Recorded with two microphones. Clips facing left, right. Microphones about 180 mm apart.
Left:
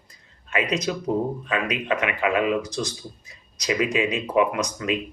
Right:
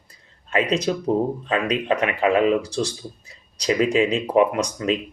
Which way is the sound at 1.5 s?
30° right (ahead or behind).